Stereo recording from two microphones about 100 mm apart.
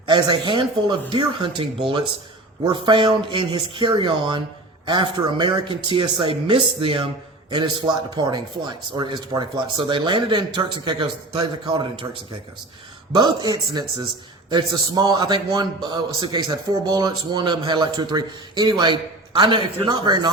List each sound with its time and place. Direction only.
0.0 s speech: 55° right (ahead or behind)
2.7 s speech: 55° right (ahead or behind)
7.5 s a man's voice: 50° right (ahead or behind)
13.1 s a man's voice: 45° right (ahead or behind)